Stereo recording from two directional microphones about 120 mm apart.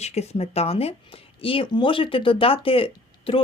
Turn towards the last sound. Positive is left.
turn(degrees=50)  # may be behind; listen again after turning